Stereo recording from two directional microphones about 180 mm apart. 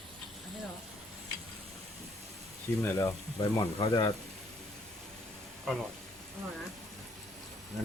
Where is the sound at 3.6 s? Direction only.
25° left (ahead or behind).